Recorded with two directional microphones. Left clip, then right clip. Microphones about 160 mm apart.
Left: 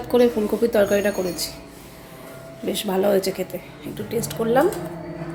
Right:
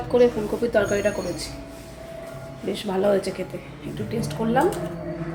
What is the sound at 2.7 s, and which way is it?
Speech, 45° left (ahead or behind).